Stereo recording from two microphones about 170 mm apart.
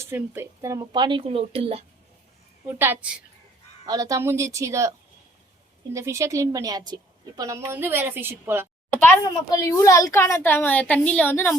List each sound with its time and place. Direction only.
0.0 s speech: 15° right (ahead or behind); by 1.8 s 35° right (ahead or behind)
2.7 s a woman's voice: 10° right (ahead or behind)
3.8 s a woman's voice: 20° right (ahead or behind)
9.0 s a woman's voice: 15° left (ahead or behind)